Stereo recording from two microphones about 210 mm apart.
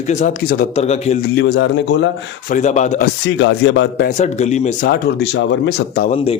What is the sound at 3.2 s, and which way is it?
Speech, 60° left (ahead or behind).